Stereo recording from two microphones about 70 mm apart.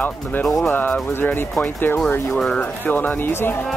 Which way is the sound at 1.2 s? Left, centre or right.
Left.